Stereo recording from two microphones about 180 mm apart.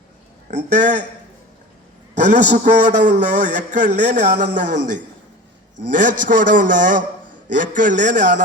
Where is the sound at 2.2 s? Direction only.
45° right (ahead or behind).